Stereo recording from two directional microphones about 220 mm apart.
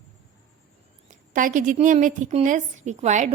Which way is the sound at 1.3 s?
35° right (ahead or behind).